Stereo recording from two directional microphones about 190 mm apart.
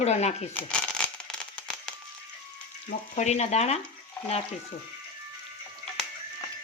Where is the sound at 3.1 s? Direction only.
35° left (ahead or behind).